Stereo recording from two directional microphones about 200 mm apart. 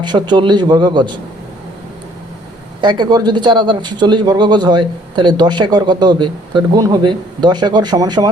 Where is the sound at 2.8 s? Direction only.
25° right (ahead or behind).